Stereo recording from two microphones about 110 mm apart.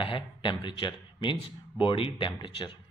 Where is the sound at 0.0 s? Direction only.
50° left (ahead or behind).